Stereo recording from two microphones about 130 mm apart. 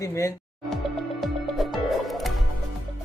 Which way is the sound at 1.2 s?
Centre (ahead or behind).